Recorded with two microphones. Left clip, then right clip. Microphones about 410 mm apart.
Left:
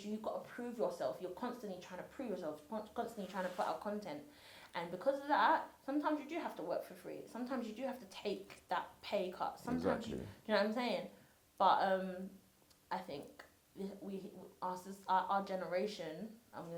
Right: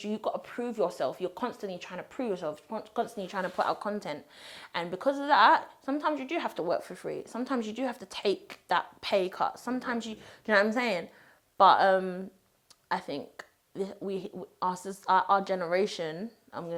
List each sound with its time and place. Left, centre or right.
0.0 s a woman's voice: right